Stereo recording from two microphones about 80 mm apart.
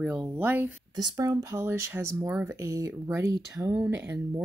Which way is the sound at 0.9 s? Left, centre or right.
Right.